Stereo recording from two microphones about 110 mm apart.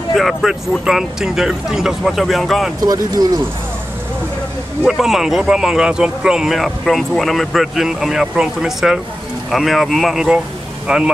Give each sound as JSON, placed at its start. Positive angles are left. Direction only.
{"t": 0.1, "sound": "speech", "side_deg": 0}
{"t": 2.8, "sound": "speech", "side_deg": -35}
{"t": 4.8, "sound": "speech", "side_deg": -5}